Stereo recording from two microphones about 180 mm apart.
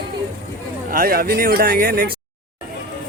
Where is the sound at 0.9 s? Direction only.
55° right (ahead or behind).